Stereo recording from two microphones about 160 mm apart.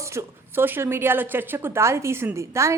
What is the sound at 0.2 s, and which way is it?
A woman's voice, 15° right (ahead or behind).